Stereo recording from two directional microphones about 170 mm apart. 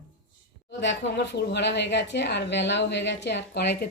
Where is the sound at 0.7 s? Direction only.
90° left.